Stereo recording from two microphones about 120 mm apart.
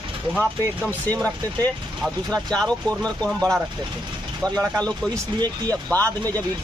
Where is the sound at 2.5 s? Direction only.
5° left (ahead or behind).